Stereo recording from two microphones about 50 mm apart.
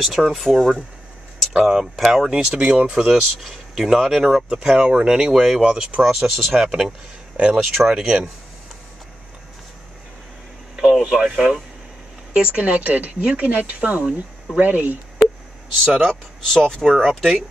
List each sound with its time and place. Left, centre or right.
0.0 s speech: centre
1.5 s speech: centre
2.5 s speech: right
3.4 s speech: centre
5.6 s speech: right
6.0 s speech: centre
6.6 s speech: centre
10.8 s speech: centre
12.4 s speech: right
16.1 s speech: centre